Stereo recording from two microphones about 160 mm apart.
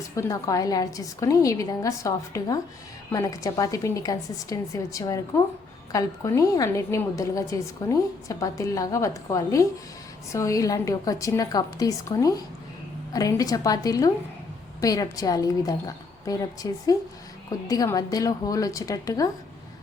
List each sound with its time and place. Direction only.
0.2 s a woman's voice: 20° left (ahead or behind)